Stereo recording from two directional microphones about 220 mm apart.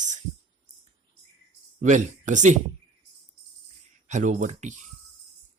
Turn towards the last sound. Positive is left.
turn(degrees=-35)  # may be behind; listen again after turning